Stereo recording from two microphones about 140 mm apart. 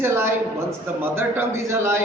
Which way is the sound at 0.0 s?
15° right (ahead or behind).